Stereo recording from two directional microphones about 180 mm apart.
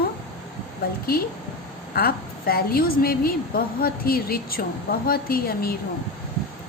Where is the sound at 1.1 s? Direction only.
60° left (ahead or behind).